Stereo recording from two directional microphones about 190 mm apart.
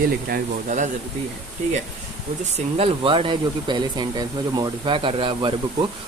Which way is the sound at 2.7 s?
30° right (ahead or behind).